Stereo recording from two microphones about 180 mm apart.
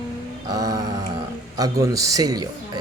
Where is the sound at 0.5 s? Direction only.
20° right (ahead or behind).